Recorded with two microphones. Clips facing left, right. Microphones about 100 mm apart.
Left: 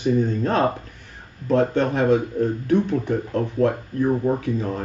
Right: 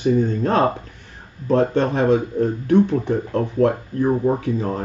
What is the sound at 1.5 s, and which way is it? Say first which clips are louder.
Speech: right 2 dB; 40° right (ahead or behind).